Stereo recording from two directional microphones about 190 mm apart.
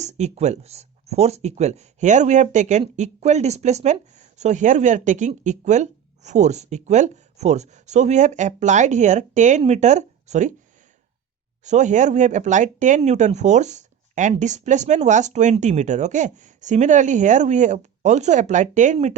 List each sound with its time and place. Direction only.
0.0 s speech: 35° right (ahead or behind)
11.6 s speech: 40° right (ahead or behind)